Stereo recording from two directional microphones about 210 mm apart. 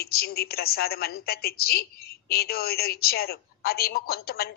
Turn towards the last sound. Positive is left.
turn(degrees=45)  # may be behind; listen again after turning